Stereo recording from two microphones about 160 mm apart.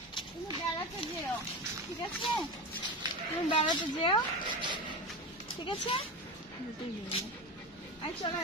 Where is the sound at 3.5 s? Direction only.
30° left (ahead or behind).